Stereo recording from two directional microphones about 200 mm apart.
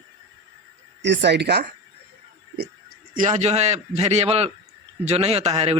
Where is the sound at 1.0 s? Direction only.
60° right (ahead or behind).